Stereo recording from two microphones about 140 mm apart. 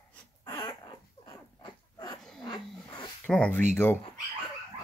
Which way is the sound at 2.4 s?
35° left (ahead or behind).